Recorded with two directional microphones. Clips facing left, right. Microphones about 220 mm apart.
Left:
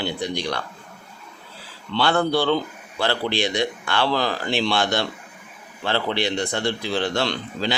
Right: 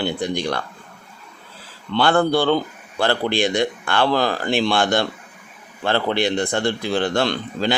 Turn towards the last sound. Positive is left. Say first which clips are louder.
# right 4 dB
turn(degrees=-50)  # may be behind; listen again after turning